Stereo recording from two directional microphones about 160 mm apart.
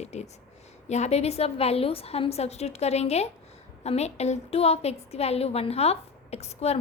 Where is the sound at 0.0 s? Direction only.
40° left (ahead or behind).